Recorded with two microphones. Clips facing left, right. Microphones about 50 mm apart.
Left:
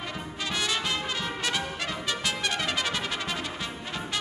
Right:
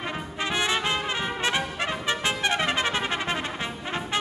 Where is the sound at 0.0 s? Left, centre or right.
Right.